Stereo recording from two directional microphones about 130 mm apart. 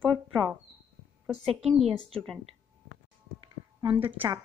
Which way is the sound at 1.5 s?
Centre (ahead or behind).